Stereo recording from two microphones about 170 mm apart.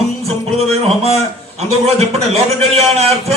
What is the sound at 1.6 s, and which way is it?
A man's voice, 40° right (ahead or behind).